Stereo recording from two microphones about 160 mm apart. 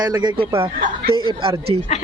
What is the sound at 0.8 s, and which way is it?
Speech, 60° right (ahead or behind).